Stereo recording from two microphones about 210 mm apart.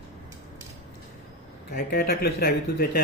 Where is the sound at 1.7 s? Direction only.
45° left (ahead or behind).